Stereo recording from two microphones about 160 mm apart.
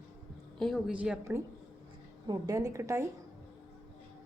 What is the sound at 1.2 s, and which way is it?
A woman's voice, 15° right (ahead or behind).